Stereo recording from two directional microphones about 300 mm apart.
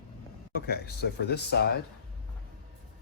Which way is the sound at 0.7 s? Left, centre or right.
Left.